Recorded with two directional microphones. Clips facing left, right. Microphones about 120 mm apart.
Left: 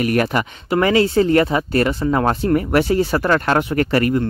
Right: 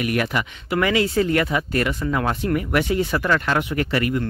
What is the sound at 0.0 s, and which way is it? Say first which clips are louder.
Speech: left 5 dB; 40° left (ahead or behind).